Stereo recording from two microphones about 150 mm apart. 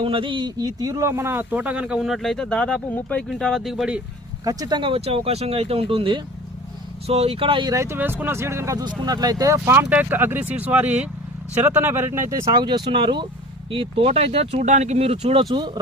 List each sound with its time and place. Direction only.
0.0 s speech: 35° right (ahead or behind); by 4.0 s 5° right (ahead or behind)
4.4 s speech: 25° right (ahead or behind)
7.7 s speech: 20° right (ahead or behind)